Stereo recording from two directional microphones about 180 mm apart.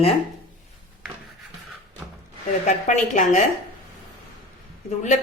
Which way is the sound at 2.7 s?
40° left (ahead or behind).